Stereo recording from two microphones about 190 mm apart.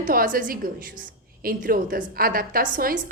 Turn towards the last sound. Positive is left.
turn(degrees=-50)  # may be behind; listen again after turning